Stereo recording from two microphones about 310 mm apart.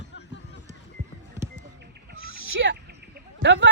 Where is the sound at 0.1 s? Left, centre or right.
Left.